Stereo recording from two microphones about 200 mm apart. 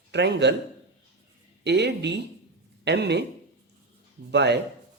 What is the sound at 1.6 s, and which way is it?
Speech, 60° right (ahead or behind).